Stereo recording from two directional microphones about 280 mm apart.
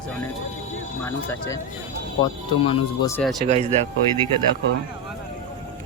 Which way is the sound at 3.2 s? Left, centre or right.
Centre.